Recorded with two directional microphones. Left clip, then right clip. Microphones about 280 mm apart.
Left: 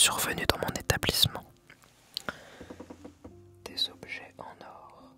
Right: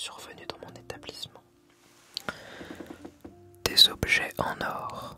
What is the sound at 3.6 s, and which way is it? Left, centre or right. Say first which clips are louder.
Whispering: right 13 dB; right.